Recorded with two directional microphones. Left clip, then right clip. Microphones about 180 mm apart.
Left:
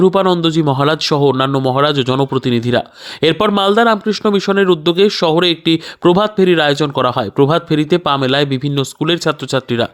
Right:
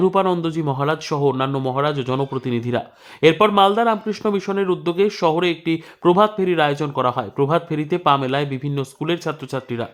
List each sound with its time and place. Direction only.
0.0 s speech: 30° left (ahead or behind)